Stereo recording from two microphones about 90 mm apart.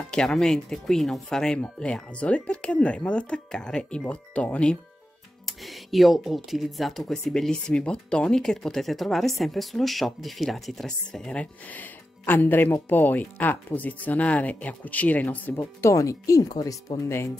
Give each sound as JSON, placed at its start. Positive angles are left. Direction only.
{"t": 0.1, "sound": "speech", "side_deg": 5}
{"t": 5.5, "sound": "speech", "side_deg": 0}
{"t": 11.7, "sound": "speech", "side_deg": 20}